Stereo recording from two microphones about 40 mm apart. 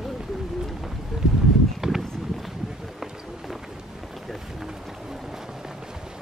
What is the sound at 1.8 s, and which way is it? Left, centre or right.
Run, centre.